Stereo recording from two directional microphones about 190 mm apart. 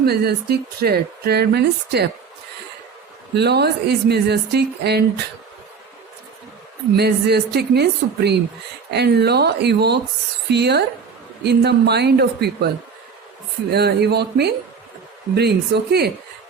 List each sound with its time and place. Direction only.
0.0 s speech: 55° right (ahead or behind)
3.3 s speech: 60° right (ahead or behind)
6.9 s speech: 60° right (ahead or behind)